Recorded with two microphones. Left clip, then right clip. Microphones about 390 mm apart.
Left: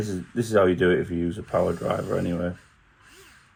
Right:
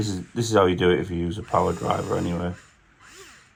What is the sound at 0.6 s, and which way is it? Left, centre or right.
Speech, right.